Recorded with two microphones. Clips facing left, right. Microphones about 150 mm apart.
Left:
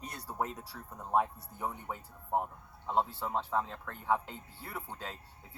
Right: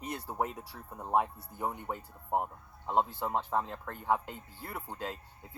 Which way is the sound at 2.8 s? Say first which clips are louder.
Right 2 dB; 15° right (ahead or behind).